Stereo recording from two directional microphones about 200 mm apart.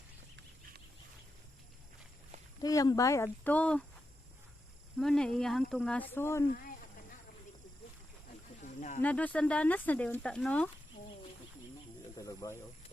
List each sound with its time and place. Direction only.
2.6 s speech: 20° left (ahead or behind)
4.9 s speech: 5° left (ahead or behind)
6.5 s speech: 45° left (ahead or behind)
8.6 s snake: 40° left (ahead or behind)
9.0 s speech: 5° left (ahead or behind)
12.1 s bird: 15° left (ahead or behind)